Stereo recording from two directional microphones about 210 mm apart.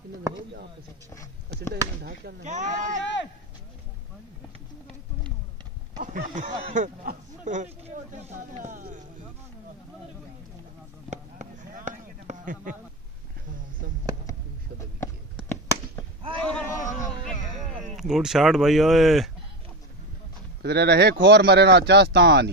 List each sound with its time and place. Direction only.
1.1 s speech: 15° left (ahead or behind)
2.4 s speech: 35° right (ahead or behind)
3.0 s speech: 60° left (ahead or behind)
5.9 s speech: 35° right (ahead or behind)
11.1 s a sound: 35° right (ahead or behind)
16.4 s speech: 5° left (ahead or behind)
20.6 s speech: 50° right (ahead or behind)